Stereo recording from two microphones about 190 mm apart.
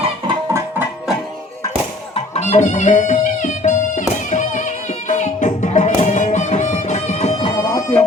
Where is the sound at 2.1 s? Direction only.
35° left (ahead or behind).